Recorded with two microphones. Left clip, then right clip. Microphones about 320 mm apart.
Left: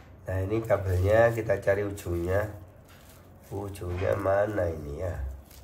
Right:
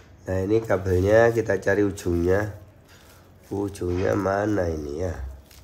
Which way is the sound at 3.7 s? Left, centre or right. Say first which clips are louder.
Right 4 dB; right.